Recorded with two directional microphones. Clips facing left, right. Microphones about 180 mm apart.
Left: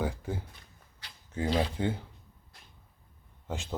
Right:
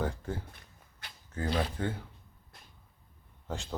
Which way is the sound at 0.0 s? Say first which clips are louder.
Left 1 dB; 10° left (ahead or behind).